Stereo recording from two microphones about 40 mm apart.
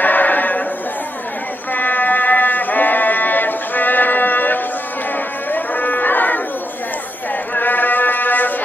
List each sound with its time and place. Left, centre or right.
0.0 s a sound: left
1.7 s music: left
5.1 s cattle: left
7.5 s mantra: left